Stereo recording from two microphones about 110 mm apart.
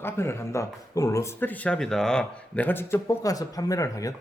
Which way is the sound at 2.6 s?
20° left (ahead or behind).